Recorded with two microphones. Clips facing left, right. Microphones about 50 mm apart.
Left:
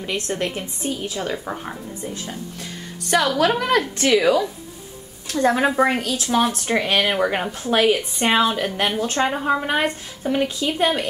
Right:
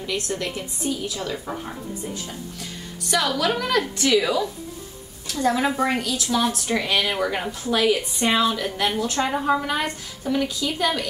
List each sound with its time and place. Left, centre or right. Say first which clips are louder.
0.0 s a woman's voice: left 2 dB; left
3.3 s a woman's voice: left 4 dB; left
9.3 s a woman's voice: left 1 dB; left